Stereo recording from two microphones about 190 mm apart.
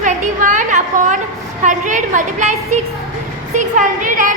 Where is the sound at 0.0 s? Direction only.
40° right (ahead or behind).